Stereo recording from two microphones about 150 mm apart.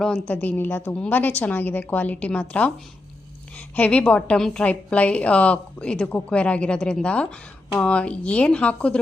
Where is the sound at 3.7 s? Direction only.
10° left (ahead or behind).